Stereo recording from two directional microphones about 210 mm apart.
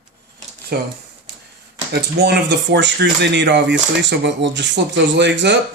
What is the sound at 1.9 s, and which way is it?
Speech, 55° right (ahead or behind).